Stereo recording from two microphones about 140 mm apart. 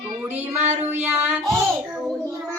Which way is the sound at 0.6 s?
55° right (ahead or behind).